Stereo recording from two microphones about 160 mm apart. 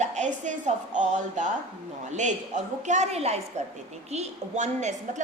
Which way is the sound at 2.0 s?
50° right (ahead or behind).